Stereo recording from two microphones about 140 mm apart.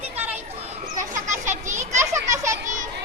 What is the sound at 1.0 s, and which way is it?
Children playing, 65° right (ahead or behind).